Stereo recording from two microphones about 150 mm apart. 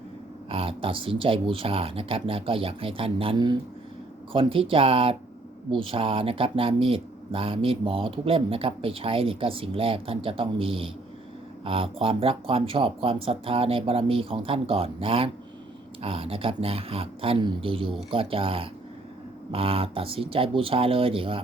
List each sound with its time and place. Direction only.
0.5 s speech: 40° right (ahead or behind)